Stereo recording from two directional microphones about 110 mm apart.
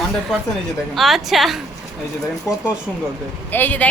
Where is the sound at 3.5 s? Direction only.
15° left (ahead or behind).